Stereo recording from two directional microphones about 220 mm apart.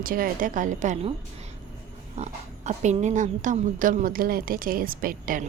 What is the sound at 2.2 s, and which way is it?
A woman's voice, 30° right (ahead or behind).